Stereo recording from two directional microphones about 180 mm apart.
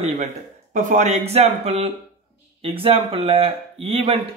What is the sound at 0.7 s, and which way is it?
A man's voice, 45° right (ahead or behind).